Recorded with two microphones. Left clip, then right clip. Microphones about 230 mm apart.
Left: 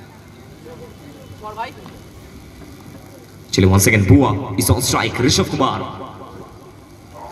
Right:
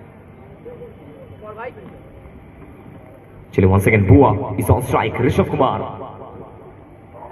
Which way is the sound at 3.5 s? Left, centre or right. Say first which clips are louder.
Even; left.